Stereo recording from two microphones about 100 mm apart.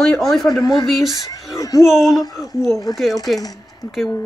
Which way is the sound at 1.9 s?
5° right (ahead or behind).